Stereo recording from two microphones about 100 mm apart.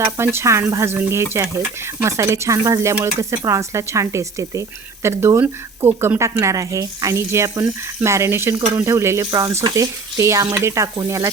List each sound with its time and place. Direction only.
0.2 s speech: 25° right (ahead or behind)